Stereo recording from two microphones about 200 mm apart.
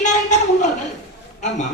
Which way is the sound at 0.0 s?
35° left (ahead or behind).